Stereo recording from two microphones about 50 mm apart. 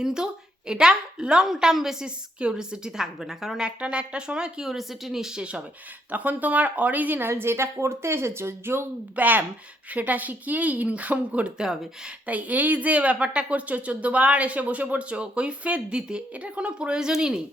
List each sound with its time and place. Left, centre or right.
0.0 s a woman's voice: centre
3.8 s a woman's voice: right
5.4 s speech: right
6.1 s speech: right
7.3 s a woman's voice: right
9.1 s speech: right
11.5 s a woman's voice: centre
12.2 s speech: right; by 17.4 s centre